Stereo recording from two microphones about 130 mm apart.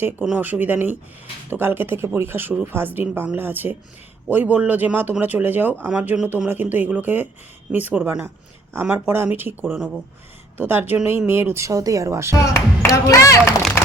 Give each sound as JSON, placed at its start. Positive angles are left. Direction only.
{"t": 0.3, "sound": "speech", "side_deg": -15}
{"t": 12.4, "sound": "speech", "side_deg": 25}